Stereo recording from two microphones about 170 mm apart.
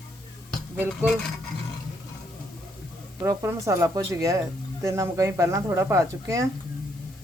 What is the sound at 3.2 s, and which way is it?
A woman's voice, 20° right (ahead or behind).